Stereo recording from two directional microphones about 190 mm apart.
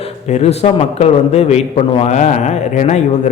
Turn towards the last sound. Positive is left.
turn(degrees=40)  # may be behind; listen again after turning